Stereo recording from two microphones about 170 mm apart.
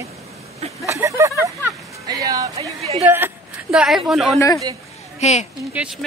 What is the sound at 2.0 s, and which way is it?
Music, 20° right (ahead or behind).